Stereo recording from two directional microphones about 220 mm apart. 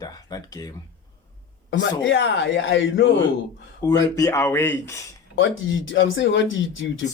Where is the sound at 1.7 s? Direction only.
55° left (ahead or behind).